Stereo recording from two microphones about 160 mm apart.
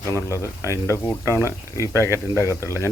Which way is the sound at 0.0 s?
15° left (ahead or behind).